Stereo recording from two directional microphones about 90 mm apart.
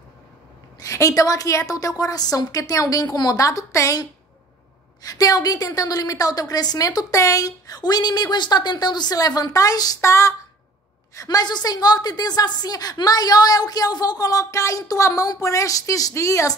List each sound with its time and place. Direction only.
0.7 s a woman's voice: 40° left (ahead or behind)
11.2 s a woman's voice: 50° left (ahead or behind); by 16.5 s 35° left (ahead or behind)